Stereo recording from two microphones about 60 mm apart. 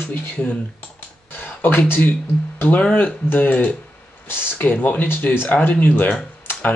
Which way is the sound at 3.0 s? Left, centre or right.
Left.